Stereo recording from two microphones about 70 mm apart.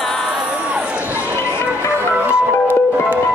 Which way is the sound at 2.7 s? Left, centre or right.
Right.